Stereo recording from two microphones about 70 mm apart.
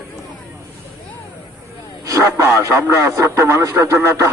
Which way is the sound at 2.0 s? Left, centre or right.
Right.